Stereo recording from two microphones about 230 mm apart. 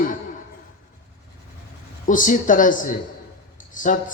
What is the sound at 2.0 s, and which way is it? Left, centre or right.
Speech, left.